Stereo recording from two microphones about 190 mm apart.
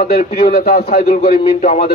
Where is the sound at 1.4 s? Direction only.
35° left (ahead or behind).